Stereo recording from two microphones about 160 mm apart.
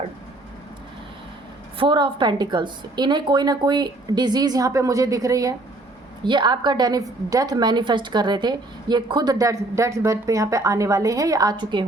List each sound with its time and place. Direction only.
1.8 s a woman's voice: 30° right (ahead or behind)